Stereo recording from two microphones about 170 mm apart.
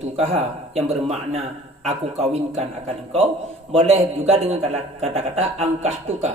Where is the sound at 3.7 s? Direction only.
35° right (ahead or behind).